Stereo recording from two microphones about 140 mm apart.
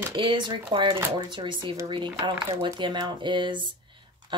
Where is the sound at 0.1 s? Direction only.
35° right (ahead or behind).